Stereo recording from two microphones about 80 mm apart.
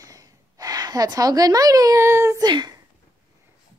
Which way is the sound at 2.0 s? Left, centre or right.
Right.